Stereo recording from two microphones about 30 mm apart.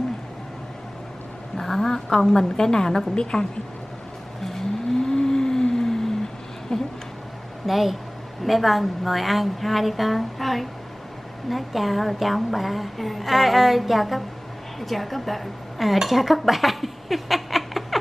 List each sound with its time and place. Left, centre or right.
1.6 s a woman's voice: centre
5.0 s vehicle: left
6.7 s speech: left
7.6 s a woman's voice: centre